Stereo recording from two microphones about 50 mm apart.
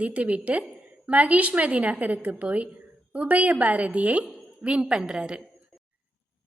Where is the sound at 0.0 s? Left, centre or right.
Right.